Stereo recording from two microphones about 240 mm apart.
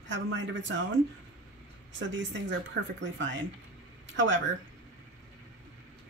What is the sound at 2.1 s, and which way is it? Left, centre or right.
Speech, right.